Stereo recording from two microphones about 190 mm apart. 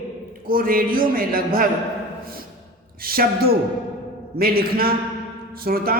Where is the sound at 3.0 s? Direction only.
50° right (ahead or behind).